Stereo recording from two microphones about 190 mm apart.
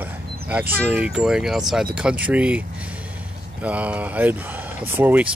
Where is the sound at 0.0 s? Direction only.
10° right (ahead or behind).